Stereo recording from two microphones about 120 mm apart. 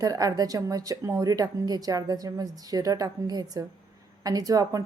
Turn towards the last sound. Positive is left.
turn(degrees=-30)  # may be behind; listen again after turning